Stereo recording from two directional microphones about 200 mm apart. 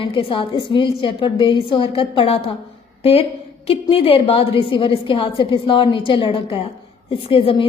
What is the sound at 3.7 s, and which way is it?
A woman's voice, 30° left (ahead or behind).